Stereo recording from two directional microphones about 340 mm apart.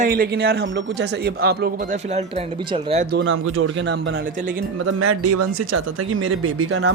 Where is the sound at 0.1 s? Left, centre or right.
Right.